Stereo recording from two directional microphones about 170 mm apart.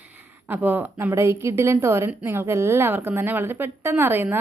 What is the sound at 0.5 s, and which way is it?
A woman's voice, 10° right (ahead or behind).